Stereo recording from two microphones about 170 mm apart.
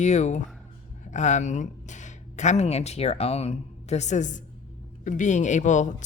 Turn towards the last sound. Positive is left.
turn(degrees=45)  # may be behind; listen again after turning